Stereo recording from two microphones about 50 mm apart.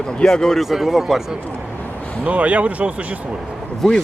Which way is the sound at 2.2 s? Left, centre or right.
Right.